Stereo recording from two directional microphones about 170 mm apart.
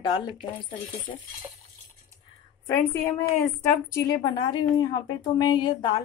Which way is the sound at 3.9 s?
20° left (ahead or behind).